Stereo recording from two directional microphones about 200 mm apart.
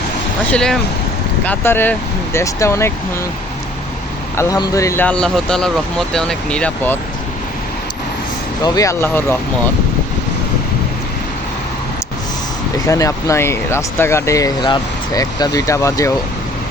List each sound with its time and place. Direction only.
0.5 s speech: 5° left (ahead or behind)
4.4 s speech: 20° left (ahead or behind)
8.6 s speech: 15° left (ahead or behind)
12.9 s speech: 15° left (ahead or behind)